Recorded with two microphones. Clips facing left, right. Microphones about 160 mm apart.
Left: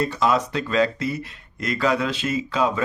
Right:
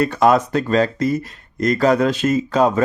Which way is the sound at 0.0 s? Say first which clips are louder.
Right 6 dB; 55° right (ahead or behind).